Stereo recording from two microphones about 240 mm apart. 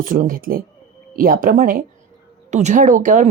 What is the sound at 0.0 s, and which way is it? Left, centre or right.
Speech, right.